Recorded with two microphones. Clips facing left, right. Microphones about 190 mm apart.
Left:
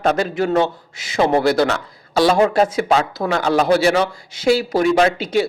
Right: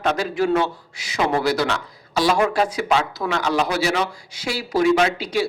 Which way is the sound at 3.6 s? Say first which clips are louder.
Left 7 dB; 55° left (ahead or behind).